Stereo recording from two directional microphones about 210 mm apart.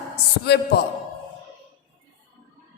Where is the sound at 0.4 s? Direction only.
50° left (ahead or behind).